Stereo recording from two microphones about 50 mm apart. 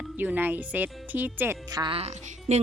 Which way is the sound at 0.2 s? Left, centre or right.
Right.